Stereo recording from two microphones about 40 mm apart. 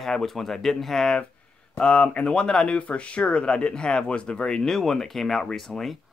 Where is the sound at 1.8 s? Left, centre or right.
Left.